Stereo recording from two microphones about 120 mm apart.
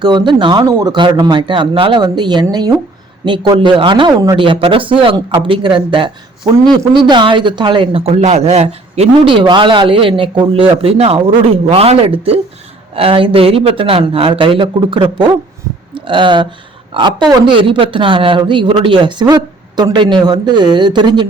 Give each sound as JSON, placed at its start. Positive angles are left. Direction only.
{"t": 0.0, "sound": "speech", "side_deg": -40}
{"t": 4.4, "sound": "speech", "side_deg": -45}
{"t": 8.2, "sound": "a man's voice", "side_deg": -70}
{"t": 9.2, "sound": "speech", "side_deg": -45}